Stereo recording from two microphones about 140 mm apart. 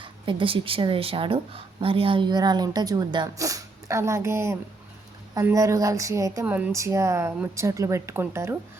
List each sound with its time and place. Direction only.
0.0 s a woman's voice: 35° right (ahead or behind); by 8.5 s 15° right (ahead or behind)